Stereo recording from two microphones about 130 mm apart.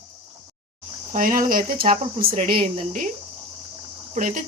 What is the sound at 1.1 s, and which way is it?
Speech, 90° right.